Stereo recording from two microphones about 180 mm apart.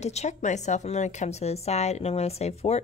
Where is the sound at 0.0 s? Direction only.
40° left (ahead or behind).